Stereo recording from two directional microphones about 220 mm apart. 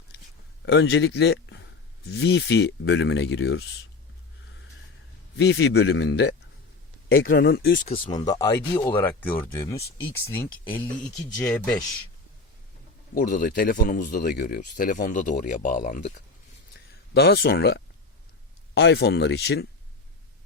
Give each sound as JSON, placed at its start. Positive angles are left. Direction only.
{"t": 0.6, "sound": "speech", "side_deg": 50}
{"t": 5.4, "sound": "speech", "side_deg": 50}
{"t": 8.1, "sound": "speech", "side_deg": 15}
{"t": 13.1, "sound": "speech", "side_deg": 35}
{"t": 16.7, "sound": "a sound", "side_deg": 50}
{"t": 18.7, "sound": "speech", "side_deg": 50}